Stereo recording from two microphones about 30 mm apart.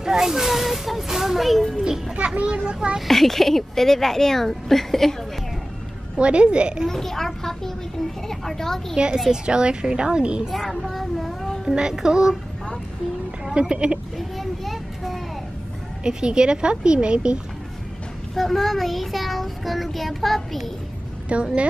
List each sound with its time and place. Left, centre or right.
0.0 s speech: centre
2.1 s a child's voice: right
3.1 s a woman's voice: centre
6.1 s speech: right
6.9 s a woman's voice: centre
8.9 s speech: right
10.7 s a sound: centre
11.7 s music: right
13.6 s speech: right
14.1 s a sound: centre
16.0 s speech: right
18.3 s child singing: centre
21.3 s a child's voice: right